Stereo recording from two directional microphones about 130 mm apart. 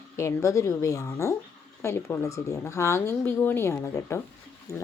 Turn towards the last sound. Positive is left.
turn(degrees=20)  # may be behind; listen again after turning